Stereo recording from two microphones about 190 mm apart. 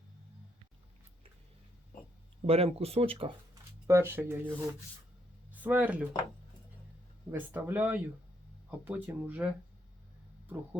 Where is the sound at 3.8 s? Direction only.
15° right (ahead or behind).